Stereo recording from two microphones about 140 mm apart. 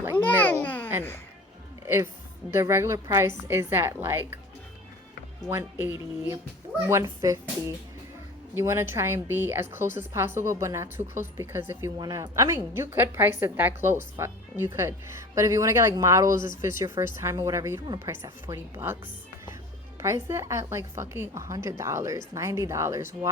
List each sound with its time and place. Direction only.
0.2 s a sound: 10° left (ahead or behind)
0.6 s babbling: 10° left (ahead or behind)
2.6 s a woman's voice: 20° right (ahead or behind)
5.5 s a woman's voice: 15° right (ahead or behind)
8.5 s a woman's voice: 15° right (ahead or behind)
11.9 s a woman's voice: 30° right (ahead or behind)
20.0 s a woman's voice: 20° right (ahead or behind)